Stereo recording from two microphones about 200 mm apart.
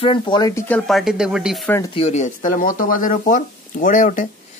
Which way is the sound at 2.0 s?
35° left (ahead or behind).